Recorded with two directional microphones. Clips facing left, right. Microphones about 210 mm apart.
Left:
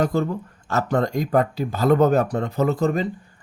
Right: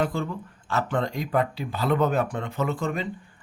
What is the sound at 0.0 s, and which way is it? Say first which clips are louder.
Speech: left 5 dB; 40° left (ahead or behind).